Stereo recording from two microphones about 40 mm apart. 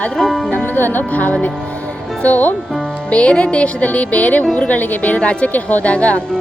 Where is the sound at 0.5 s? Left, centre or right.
Left.